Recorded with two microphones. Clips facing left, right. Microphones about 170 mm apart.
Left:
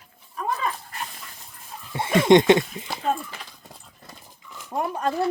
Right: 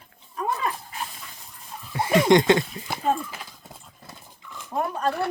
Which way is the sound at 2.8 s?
5° right (ahead or behind).